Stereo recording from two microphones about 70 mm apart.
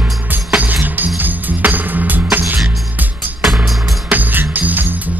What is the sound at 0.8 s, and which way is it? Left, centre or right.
Music, right.